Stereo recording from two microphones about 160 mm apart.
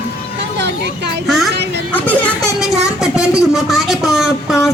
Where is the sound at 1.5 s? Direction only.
90° right.